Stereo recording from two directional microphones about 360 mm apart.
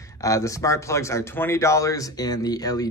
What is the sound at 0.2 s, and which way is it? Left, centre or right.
Speech, centre.